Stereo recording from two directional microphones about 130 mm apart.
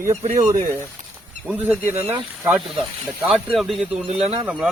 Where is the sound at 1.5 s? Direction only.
10° right (ahead or behind).